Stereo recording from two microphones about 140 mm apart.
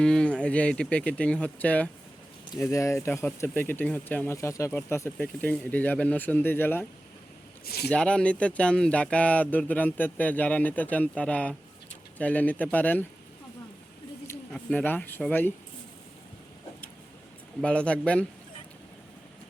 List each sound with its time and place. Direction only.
0.0 s speech: 5° left (ahead or behind)
7.9 s speech: 10° left (ahead or behind)
14.5 s speech: 10° left (ahead or behind)
17.6 s speech: 10° left (ahead or behind)